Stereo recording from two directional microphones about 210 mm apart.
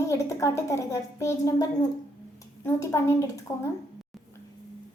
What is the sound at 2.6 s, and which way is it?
A woman's voice, 15° left (ahead or behind).